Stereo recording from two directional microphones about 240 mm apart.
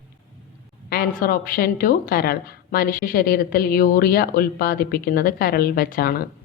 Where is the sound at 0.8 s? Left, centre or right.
Left.